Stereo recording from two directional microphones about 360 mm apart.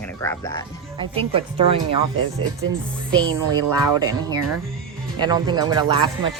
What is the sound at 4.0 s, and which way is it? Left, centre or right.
Speech, centre.